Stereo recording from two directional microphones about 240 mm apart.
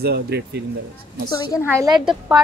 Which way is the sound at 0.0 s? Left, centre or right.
Right.